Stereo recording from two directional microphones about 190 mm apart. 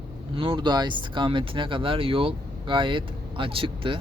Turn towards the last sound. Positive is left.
turn(degrees=-25)  # may be behind; listen again after turning